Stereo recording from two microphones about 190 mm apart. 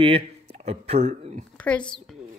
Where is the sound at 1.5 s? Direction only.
5° left (ahead or behind).